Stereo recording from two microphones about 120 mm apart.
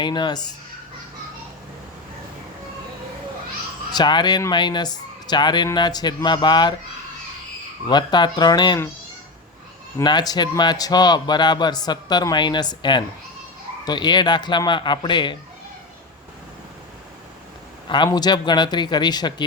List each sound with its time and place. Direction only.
0.0 s a man's voice: 40° left (ahead or behind)
3.9 s a man's voice: 40° left (ahead or behind)
7.9 s a man's voice: 40° left (ahead or behind)
10.0 s a man's voice: 35° left (ahead or behind)
17.8 s a man's voice: 40° left (ahead or behind)